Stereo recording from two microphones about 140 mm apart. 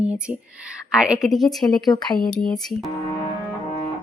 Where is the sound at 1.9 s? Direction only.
30° left (ahead or behind).